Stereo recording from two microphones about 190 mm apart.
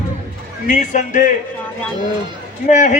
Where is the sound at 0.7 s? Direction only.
40° left (ahead or behind).